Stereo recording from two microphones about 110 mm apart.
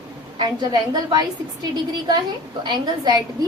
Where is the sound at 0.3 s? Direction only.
40° right (ahead or behind).